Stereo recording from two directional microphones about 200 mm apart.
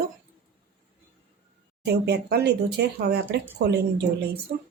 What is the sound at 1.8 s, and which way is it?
Speech, 55° right (ahead or behind).